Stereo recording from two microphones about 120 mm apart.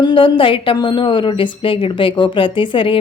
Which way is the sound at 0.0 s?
45° left (ahead or behind).